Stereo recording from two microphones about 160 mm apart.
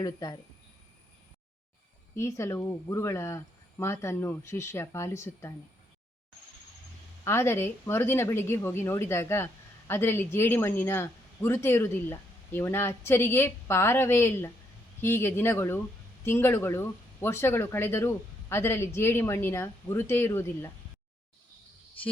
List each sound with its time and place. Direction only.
0.0 s speech: 25° left (ahead or behind)
2.1 s speech: 20° left (ahead or behind)
7.3 s speech: 15° left (ahead or behind)